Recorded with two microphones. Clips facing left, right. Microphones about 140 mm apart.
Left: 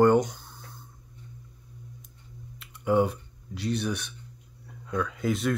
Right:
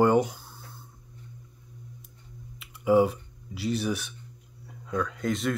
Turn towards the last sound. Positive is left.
turn(degrees=0)  # may be behind; listen again after turning